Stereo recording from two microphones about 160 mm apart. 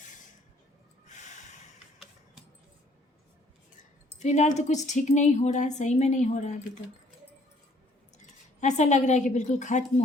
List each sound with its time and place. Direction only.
0.0 s a sound: 50° left (ahead or behind)
1.0 s snort: 50° left (ahead or behind)
4.2 s speech: 50° left (ahead or behind)
8.2 s speech: 45° left (ahead or behind)